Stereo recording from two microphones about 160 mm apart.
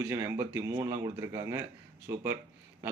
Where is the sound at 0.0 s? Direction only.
15° right (ahead or behind).